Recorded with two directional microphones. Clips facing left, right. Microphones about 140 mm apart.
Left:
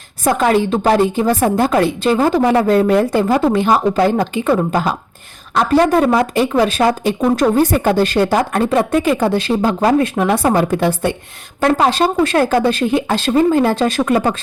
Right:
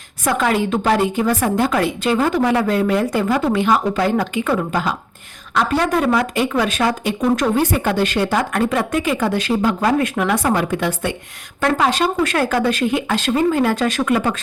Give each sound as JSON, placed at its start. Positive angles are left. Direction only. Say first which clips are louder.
{"t": 0.3, "sound": "speech", "louder": "left 4 dB", "side_deg": 35}